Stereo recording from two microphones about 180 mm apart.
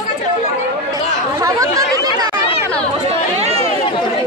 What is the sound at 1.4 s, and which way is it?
Chatter, 20° right (ahead or behind).